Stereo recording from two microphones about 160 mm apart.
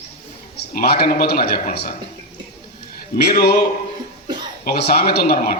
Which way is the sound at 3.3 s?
75° left (ahead or behind).